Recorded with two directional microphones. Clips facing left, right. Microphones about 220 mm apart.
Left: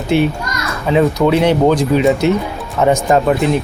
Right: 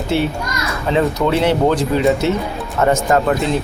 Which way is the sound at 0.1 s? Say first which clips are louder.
Left 4 dB; 15° left (ahead or behind).